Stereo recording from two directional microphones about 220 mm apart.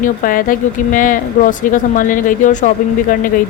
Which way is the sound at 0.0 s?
40° left (ahead or behind).